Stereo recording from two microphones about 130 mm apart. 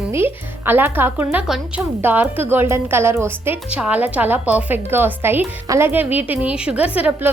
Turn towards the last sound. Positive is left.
turn(degrees=-10)  # may be behind; listen again after turning